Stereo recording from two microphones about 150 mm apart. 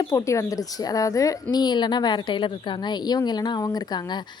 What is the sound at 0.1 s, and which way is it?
A woman's voice, 20° left (ahead or behind).